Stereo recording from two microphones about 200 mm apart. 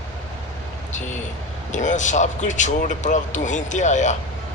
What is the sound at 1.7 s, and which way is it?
A man's voice, 40° left (ahead or behind).